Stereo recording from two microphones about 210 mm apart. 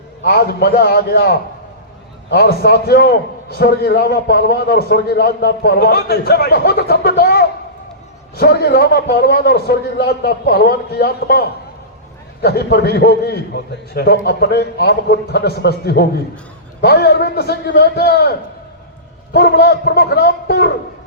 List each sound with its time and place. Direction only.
0.3 s a man's voice: 50° left (ahead or behind)